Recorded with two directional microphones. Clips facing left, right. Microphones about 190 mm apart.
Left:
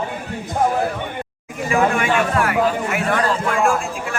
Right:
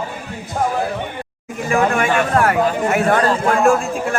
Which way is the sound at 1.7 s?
45° right (ahead or behind).